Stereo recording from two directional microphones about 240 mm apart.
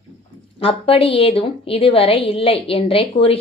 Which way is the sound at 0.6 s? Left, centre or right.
Left.